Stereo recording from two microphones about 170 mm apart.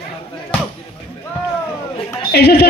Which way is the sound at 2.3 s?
75° left (ahead or behind).